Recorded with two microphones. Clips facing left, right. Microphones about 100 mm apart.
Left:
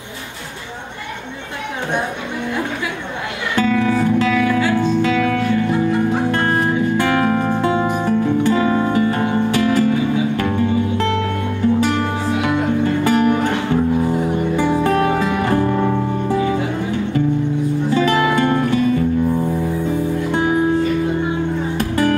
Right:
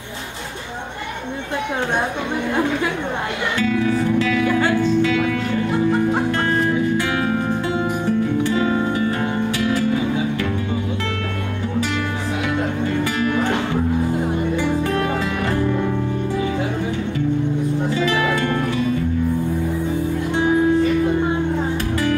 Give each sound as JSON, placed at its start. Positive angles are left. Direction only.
{"t": 3.5, "sound": "music", "side_deg": 50}
{"t": 6.3, "sound": "music", "side_deg": 55}
{"t": 13.0, "sound": "music", "side_deg": 45}
{"t": 14.8, "sound": "music", "side_deg": 40}
{"t": 17.9, "sound": "music", "side_deg": 45}
{"t": 18.3, "sound": "music", "side_deg": 25}
{"t": 21.7, "sound": "music", "side_deg": 50}